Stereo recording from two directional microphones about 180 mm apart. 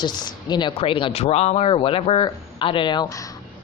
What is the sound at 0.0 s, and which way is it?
Speech, 25° left (ahead or behind).